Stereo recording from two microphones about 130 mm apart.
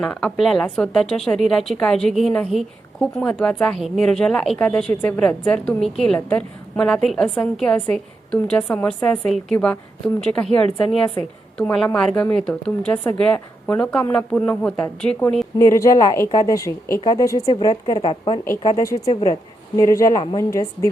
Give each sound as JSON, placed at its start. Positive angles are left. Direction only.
{"t": 0.0, "sound": "a woman's voice", "side_deg": 5}
{"t": 15.5, "sound": "a woman's voice", "side_deg": 25}
{"t": 18.6, "sound": "speech", "side_deg": 30}